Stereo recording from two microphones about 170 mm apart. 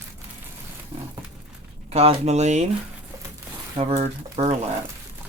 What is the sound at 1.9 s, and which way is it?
Speech, 35° right (ahead or behind).